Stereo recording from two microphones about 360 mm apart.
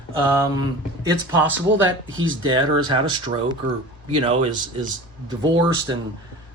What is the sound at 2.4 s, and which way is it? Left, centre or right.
Speech, centre.